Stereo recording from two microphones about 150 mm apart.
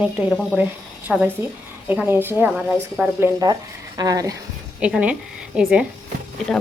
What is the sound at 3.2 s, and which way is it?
Speech, 25° right (ahead or behind).